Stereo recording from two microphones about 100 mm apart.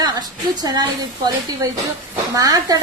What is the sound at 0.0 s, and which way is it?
A woman's voice, 40° right (ahead or behind).